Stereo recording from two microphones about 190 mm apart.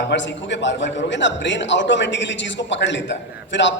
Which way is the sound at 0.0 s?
70° left (ahead or behind).